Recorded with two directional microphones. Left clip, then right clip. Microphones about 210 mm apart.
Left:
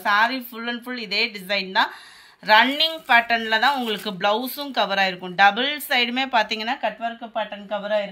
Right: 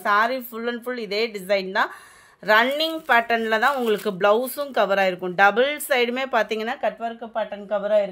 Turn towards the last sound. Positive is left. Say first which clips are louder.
# right 3 dB
turn(degrees=-55)  # may be behind; listen again after turning